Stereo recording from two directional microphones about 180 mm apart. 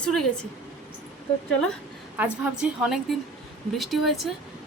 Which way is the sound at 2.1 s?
10° right (ahead or behind).